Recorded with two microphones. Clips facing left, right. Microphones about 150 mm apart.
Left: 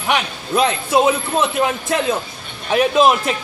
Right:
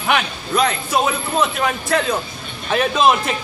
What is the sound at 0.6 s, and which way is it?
A man's voice, 25° left (ahead or behind).